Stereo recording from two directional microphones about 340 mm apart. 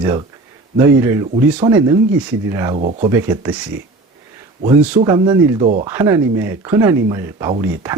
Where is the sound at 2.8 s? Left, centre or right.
Right.